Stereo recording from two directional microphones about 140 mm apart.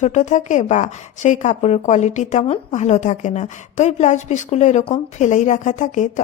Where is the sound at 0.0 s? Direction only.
55° left (ahead or behind).